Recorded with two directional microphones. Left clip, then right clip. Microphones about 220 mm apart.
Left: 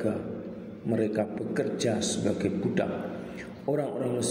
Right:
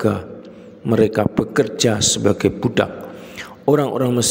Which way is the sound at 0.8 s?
50° right (ahead or behind).